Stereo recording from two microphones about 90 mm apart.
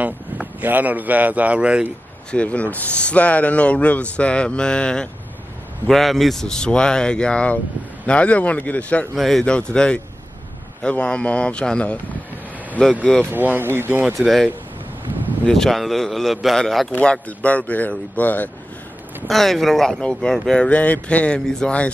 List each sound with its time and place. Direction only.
0.0 s speech: 15° right (ahead or behind)
2.3 s speech: 15° left (ahead or behind)
9.1 s speech: centre (ahead or behind)
13.0 s speech: 10° left (ahead or behind)
13.3 s speech: 20° right (ahead or behind)
14.1 s a man's voice: centre (ahead or behind)
16.9 s speech: 15° left (ahead or behind)
19.2 s speech: centre (ahead or behind)